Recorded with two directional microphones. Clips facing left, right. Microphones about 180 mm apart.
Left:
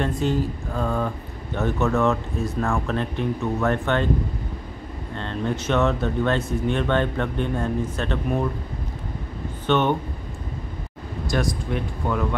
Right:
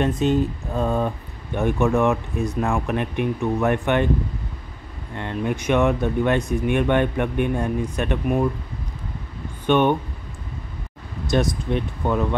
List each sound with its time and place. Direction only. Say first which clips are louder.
0.0 s speech: right 3 dB; 20° right (ahead or behind)
5.1 s speech: right 2 dB; 15° right (ahead or behind)
9.7 s speech: right 3 dB; 15° right (ahead or behind)
11.2 s speech: right 4 dB; 20° right (ahead or behind)